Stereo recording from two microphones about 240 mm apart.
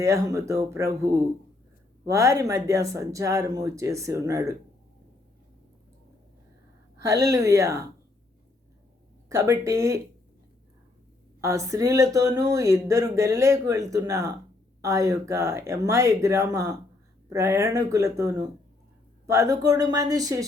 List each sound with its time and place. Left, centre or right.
0.0 s speech: centre
7.0 s speech: centre
9.3 s speech: centre
11.3 s speech: centre